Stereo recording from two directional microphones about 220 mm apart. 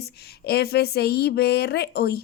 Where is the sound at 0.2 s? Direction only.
45° left (ahead or behind).